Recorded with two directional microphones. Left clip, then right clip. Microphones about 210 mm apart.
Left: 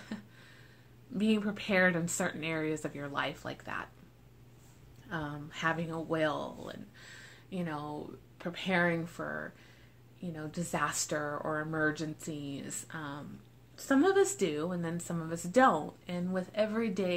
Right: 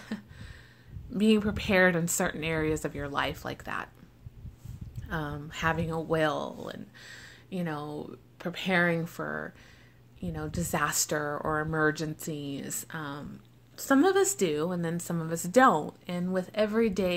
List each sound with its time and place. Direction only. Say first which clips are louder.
0.0 s a sound: right 5 dB; 45° right (ahead or behind)
1.1 s speech: right 6 dB; 45° right (ahead or behind)
5.0 s speech: right 4 dB; 45° right (ahead or behind)